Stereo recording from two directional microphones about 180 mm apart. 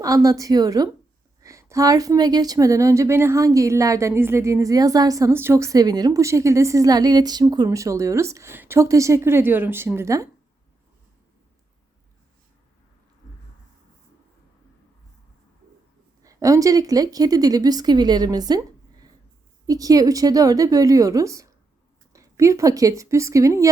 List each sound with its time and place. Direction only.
0.0 s a woman's voice: 20° right (ahead or behind)
16.2 s speech: 20° right (ahead or behind)
19.6 s speech: 20° right (ahead or behind)